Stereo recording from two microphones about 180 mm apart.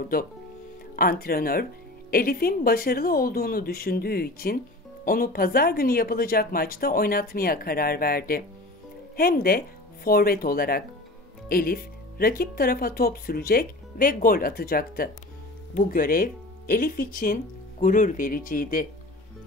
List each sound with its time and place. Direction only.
0.9 s speech: 55° left (ahead or behind)